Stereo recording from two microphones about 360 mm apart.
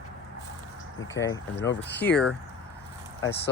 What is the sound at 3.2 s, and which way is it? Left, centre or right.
Speech, left.